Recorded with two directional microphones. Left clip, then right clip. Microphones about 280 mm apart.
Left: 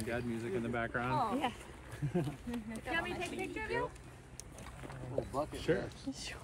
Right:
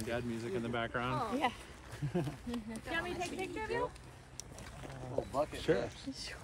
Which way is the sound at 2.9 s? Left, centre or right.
Centre.